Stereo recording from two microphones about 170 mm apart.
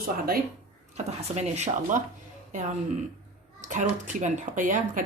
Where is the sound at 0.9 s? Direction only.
40° right (ahead or behind).